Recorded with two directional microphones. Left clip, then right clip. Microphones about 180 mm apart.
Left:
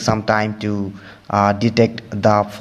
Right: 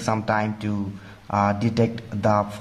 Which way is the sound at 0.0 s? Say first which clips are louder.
Left 6 dB; 25° left (ahead or behind).